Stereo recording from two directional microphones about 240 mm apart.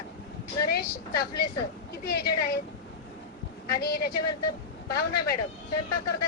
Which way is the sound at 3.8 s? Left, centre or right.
Left.